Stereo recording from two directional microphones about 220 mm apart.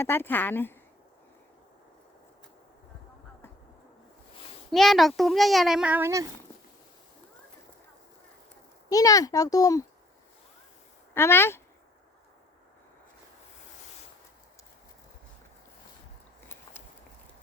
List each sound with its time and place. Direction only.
0.0 s a child's voice: 10° left (ahead or behind)
4.7 s a child's voice: centre (ahead or behind)
8.9 s a child's voice: 15° left (ahead or behind)
11.1 s a child's voice: 10° left (ahead or behind)